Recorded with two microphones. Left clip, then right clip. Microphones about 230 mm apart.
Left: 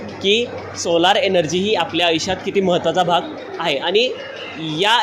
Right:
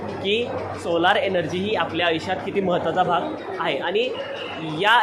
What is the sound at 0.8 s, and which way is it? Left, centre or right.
Speech, left.